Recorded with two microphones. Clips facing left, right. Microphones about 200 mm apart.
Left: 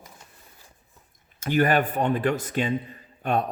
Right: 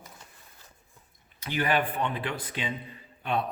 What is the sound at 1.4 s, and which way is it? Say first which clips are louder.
Speech: left 6 dB; 45° left (ahead or behind).